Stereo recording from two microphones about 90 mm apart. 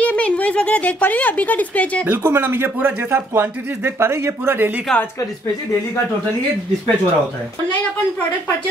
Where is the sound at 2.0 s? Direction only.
20° right (ahead or behind).